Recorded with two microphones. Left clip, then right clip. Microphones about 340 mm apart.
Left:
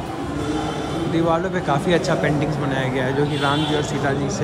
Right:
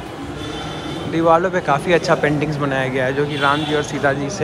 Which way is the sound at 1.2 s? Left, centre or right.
Centre.